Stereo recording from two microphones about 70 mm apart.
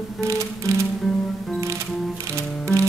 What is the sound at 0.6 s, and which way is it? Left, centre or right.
Music, right.